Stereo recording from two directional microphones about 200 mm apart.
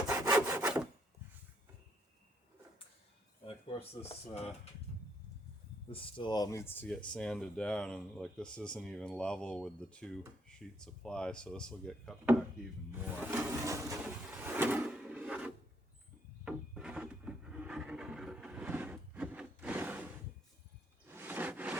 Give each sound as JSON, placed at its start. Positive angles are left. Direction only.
{"t": 0.1, "sound": "sawing", "side_deg": -15}
{"t": 3.4, "sound": "speech", "side_deg": 30}
{"t": 5.9, "sound": "speech", "side_deg": 25}
{"t": 12.9, "sound": "a sound", "side_deg": -10}
{"t": 14.3, "sound": "drawer open or close", "side_deg": -10}
{"t": 16.4, "sound": "wood", "side_deg": -5}
{"t": 21.1, "sound": "a sound", "side_deg": -10}